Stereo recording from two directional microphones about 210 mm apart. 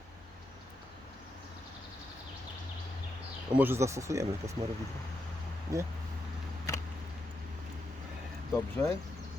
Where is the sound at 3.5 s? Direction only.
10° right (ahead or behind).